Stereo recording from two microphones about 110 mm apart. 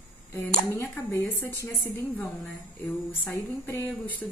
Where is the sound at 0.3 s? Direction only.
25° left (ahead or behind).